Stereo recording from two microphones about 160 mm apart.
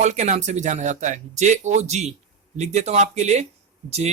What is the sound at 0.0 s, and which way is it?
Speech, 45° right (ahead or behind).